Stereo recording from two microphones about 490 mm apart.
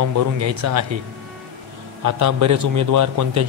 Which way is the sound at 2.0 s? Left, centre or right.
Right.